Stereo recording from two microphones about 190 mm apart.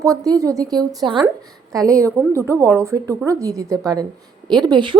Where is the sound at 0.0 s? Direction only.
15° right (ahead or behind).